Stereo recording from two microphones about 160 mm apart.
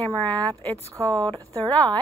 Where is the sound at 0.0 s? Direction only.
10° left (ahead or behind).